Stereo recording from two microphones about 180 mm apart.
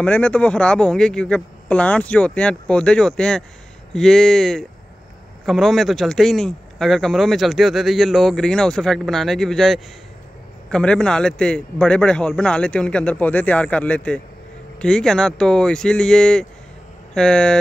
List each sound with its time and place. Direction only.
0.0 s speech: 5° left (ahead or behind)